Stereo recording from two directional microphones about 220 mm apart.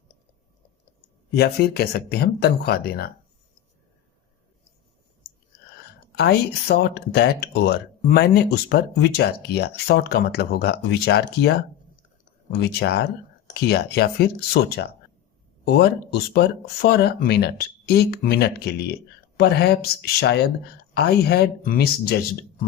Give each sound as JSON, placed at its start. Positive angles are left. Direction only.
{"t": 1.4, "sound": "speech", "side_deg": 45}
{"t": 5.9, "sound": "speech", "side_deg": 50}
{"t": 12.6, "sound": "speech", "side_deg": 50}
{"t": 16.3, "sound": "speech", "side_deg": 45}